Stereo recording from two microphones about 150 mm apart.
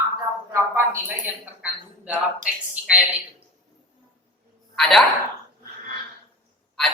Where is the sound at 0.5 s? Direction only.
15° right (ahead or behind).